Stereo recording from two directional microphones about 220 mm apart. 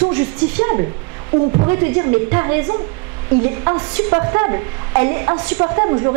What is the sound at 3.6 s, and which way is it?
Speech, 20° right (ahead or behind).